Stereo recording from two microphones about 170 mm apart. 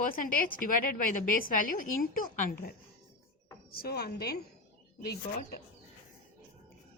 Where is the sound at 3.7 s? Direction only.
65° left (ahead or behind).